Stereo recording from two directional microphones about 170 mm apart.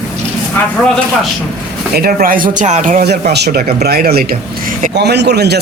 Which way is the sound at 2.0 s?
60° right (ahead or behind).